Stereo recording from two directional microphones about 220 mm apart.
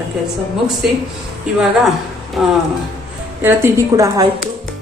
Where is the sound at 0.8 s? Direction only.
5° right (ahead or behind).